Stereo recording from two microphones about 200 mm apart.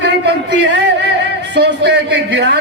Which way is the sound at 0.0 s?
60° right (ahead or behind).